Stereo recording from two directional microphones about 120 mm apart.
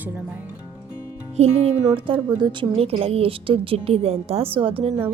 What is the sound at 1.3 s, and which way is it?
Music, 60° right (ahead or behind).